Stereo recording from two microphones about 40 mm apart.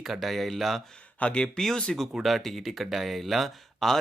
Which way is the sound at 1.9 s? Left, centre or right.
Centre.